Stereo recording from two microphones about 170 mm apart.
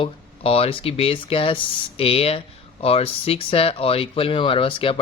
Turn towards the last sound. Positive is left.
turn(degrees=30)  # may be behind; listen again after turning